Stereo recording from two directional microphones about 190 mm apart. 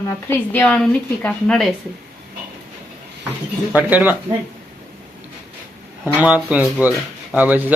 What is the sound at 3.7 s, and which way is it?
Speech, 10° right (ahead or behind).